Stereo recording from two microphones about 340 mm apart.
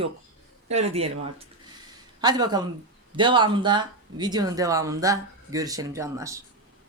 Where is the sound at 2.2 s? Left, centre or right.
Centre.